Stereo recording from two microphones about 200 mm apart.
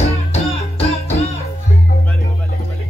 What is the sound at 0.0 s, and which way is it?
Music, 30° left (ahead or behind).